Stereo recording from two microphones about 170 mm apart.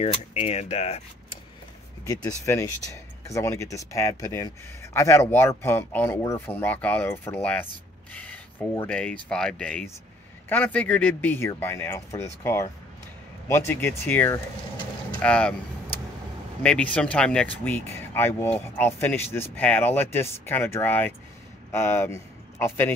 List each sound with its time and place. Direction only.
0.0 s speech: 35° left (ahead or behind)
2.0 s speech: 20° left (ahead or behind)